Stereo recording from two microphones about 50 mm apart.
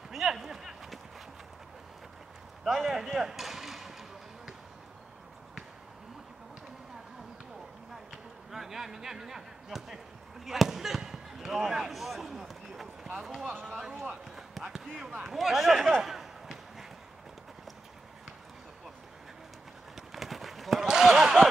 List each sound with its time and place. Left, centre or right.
0.1 s clip-clop: centre
2.6 s speech: centre
8.5 s speech: centre
10.4 s basketball bounce: centre
13.2 s speech: centre
14.3 s run: centre
15.2 s speech: centre
16.0 s a sound: centre
20.0 s a sound: centre